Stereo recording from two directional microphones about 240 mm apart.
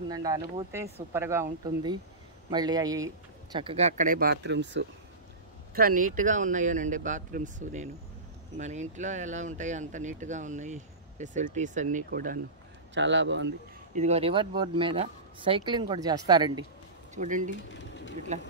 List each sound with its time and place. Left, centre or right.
0.1 s speech: centre; by 4.8 s right
5.8 s speech: right
12.9 s speech: right
13.9 s speech: right
17.1 s speech: right
17.7 s a sound: left